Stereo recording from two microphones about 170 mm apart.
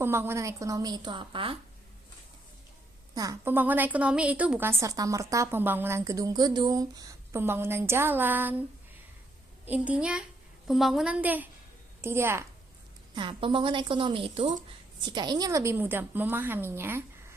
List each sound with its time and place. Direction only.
0.0 s a woman's voice: 15° right (ahead or behind); by 1.5 s 30° right (ahead or behind)
3.2 s a woman's voice: 15° right (ahead or behind)
9.6 s a woman's voice: 10° right (ahead or behind)
13.1 s a woman's voice: 30° right (ahead or behind); by 17.0 s 15° right (ahead or behind)